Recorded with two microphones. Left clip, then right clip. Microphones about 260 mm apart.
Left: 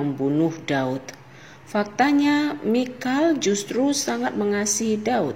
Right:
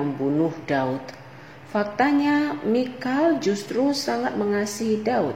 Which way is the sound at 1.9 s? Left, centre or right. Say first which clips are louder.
Left 1 dB; left.